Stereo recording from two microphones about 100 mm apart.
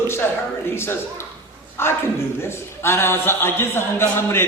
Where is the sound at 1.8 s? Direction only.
25° left (ahead or behind).